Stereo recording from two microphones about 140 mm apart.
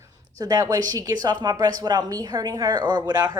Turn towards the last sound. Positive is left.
turn(degrees=-25)  # may be behind; listen again after turning